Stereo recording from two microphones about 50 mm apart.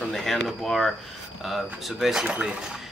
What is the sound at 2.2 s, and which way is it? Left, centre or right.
Speech, right.